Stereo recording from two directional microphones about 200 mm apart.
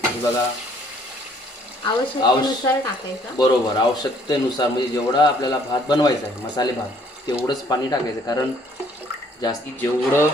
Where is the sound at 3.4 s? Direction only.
20° left (ahead or behind).